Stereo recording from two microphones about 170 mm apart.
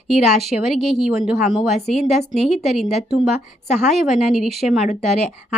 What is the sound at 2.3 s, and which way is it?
A woman's voice, centre (ahead or behind).